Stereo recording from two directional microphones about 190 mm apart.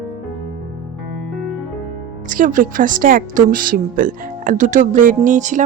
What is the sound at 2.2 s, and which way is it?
A woman's voice, 45° right (ahead or behind).